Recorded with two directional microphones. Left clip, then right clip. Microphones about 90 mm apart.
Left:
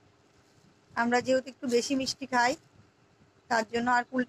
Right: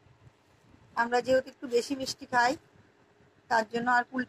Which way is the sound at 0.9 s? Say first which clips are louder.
Right 1 dB; 30° right (ahead or behind).